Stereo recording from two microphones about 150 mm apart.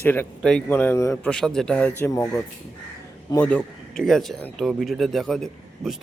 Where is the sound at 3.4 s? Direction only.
5° left (ahead or behind).